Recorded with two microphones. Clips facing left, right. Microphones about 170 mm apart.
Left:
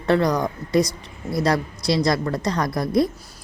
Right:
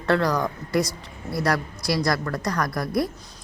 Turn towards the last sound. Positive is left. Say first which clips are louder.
# left 4 dB
turn(degrees=25)  # may be behind; listen again after turning